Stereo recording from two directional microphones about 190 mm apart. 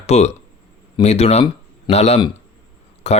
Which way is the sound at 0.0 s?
35° left (ahead or behind).